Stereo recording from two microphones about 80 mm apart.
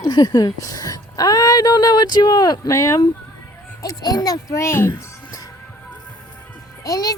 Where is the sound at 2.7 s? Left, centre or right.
Left.